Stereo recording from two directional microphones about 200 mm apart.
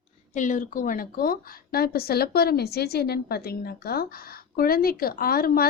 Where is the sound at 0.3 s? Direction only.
40° left (ahead or behind).